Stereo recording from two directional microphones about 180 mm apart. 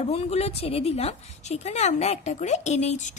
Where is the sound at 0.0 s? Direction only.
35° left (ahead or behind).